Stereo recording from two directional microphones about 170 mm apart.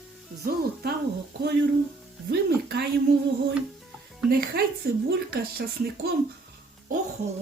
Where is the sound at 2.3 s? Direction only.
65° right (ahead or behind).